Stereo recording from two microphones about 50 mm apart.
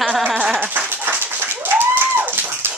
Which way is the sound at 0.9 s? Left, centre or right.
Right.